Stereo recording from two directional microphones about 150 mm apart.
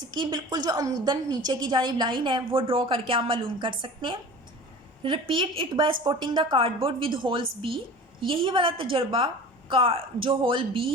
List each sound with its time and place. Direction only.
0.0 s a woman's voice: 30° right (ahead or behind)